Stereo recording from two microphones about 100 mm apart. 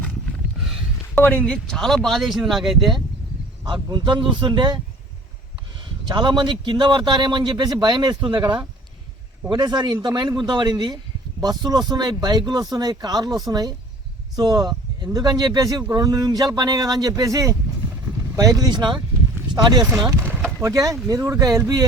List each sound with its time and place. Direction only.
0.6 s a sound: centre (ahead or behind)
1.1 s speech: 15° left (ahead or behind); by 3.0 s centre (ahead or behind)
3.6 s a man's voice: 40° right (ahead or behind)
6.1 s a man's voice: 45° right (ahead or behind)
20.1 s a sound: 25° right (ahead or behind)
20.6 s speech: 35° right (ahead or behind)